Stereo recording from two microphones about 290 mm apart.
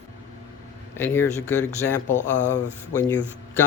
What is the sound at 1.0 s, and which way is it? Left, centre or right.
Speech, centre.